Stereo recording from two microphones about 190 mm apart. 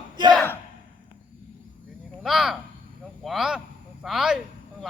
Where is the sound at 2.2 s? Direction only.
Centre (ahead or behind).